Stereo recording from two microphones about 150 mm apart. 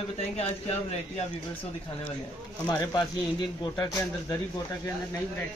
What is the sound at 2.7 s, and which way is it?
Speech, 25° left (ahead or behind).